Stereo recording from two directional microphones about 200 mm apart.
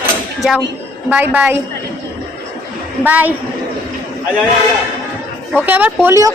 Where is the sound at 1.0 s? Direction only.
10° right (ahead or behind).